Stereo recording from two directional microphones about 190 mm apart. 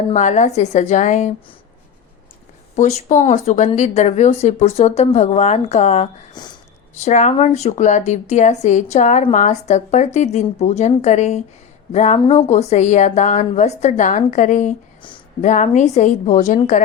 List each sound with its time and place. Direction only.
0.1 s speech: 40° left (ahead or behind)
2.7 s speech: 40° left (ahead or behind)
6.4 s speech: 20° left (ahead or behind)
7.0 s speech: 40° left (ahead or behind)
12.2 s speech: 25° left (ahead or behind)
12.5 s speech: 35° left (ahead or behind)
15.0 s a sound: 25° left (ahead or behind)
15.4 s speech: 40° left (ahead or behind)